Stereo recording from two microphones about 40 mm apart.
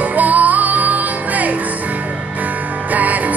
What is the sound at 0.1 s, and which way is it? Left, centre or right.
Music, right.